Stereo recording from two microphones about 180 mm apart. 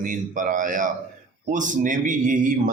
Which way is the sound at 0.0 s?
45° right (ahead or behind).